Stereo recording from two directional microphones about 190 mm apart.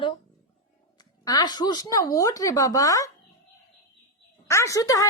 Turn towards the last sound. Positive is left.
turn(degrees=15)  # may be behind; listen again after turning